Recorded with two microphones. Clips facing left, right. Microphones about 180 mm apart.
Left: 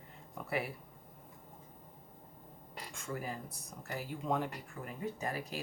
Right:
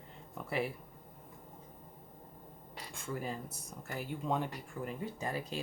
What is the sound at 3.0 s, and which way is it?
Speech, 25° right (ahead or behind).